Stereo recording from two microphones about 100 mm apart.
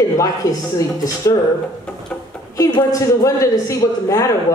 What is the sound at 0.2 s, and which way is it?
A man's voice, 35° left (ahead or behind).